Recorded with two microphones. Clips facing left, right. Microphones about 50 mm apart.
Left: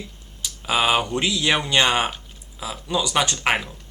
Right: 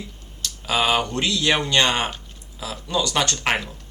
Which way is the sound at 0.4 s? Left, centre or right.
Centre.